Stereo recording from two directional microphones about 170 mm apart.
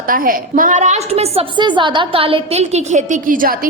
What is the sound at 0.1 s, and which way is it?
A woman's voice, 55° right (ahead or behind).